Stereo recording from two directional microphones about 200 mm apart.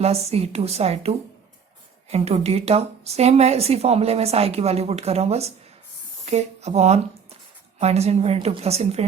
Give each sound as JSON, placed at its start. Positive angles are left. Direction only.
{"t": 0.0, "sound": "speech", "side_deg": -30}